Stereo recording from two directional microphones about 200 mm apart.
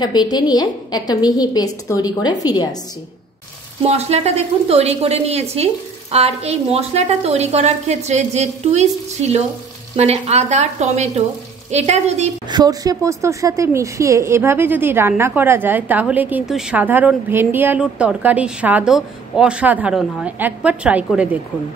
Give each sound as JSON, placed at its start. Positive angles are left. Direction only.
{"t": 0.0, "sound": "a woman's voice", "side_deg": 20}
{"t": 3.8, "sound": "a woman's voice", "side_deg": -30}
{"t": 12.4, "sound": "a woman's voice", "side_deg": -20}